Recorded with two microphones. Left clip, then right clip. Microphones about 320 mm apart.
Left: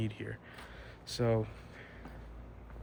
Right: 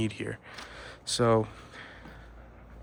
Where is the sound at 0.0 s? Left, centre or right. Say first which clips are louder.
Right 8 dB; centre.